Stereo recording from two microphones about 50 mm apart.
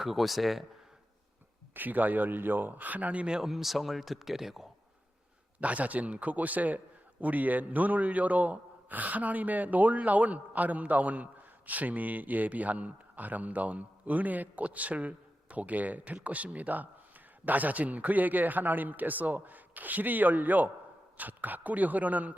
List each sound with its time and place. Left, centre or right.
0.0 s speech: centre
1.7 s a man's voice: right
3.4 s speech: centre
5.5 s a man's voice: right